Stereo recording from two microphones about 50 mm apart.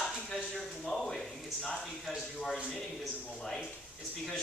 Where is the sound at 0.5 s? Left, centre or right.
Centre.